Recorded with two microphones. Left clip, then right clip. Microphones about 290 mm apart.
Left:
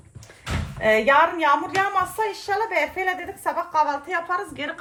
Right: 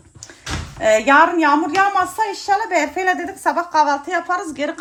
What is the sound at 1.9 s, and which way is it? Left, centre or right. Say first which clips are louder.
A woman's voice: right 5 dB; right.